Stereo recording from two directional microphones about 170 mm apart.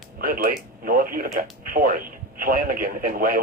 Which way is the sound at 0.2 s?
55° right (ahead or behind).